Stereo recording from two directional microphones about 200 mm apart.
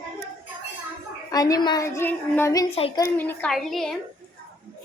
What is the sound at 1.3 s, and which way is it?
A woman's voice, 20° left (ahead or behind).